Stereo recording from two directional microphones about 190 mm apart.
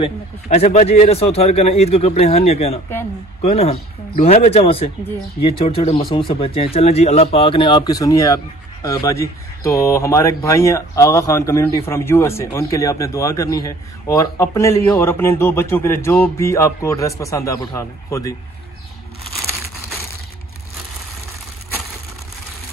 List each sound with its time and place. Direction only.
0.0 s a man's voice: 35° left (ahead or behind); by 18.3 s 15° left (ahead or behind)